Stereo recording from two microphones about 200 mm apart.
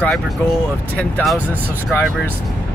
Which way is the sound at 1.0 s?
5° left (ahead or behind).